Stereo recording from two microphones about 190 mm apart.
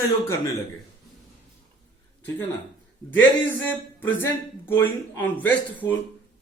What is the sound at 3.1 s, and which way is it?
A man's voice, 10° left (ahead or behind).